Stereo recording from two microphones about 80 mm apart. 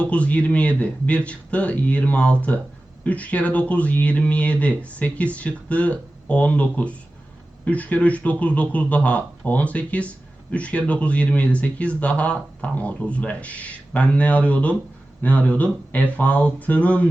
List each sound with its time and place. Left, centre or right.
0.0 s speech: centre